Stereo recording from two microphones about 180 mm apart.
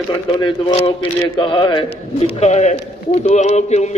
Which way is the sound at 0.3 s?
25° left (ahead or behind).